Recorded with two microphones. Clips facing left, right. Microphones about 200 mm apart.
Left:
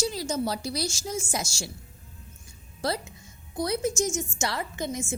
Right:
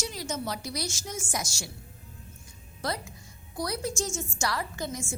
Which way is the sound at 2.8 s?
30° left (ahead or behind).